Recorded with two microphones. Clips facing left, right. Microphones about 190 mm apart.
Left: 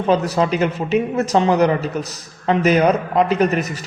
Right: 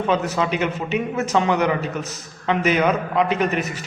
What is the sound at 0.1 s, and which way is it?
A man's voice, 35° left (ahead or behind).